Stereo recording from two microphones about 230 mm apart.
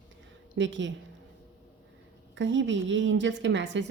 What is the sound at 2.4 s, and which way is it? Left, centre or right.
A woman's voice, right.